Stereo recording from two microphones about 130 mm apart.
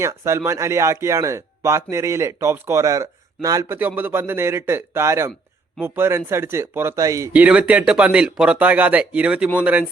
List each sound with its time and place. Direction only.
0.0 s speech: 20° right (ahead or behind)
7.3 s speech: 10° right (ahead or behind)